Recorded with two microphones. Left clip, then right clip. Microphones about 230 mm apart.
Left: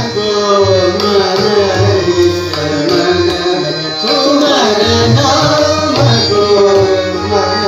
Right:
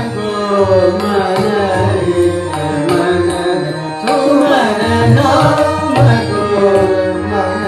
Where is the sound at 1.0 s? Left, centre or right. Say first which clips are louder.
Left 3 dB; right.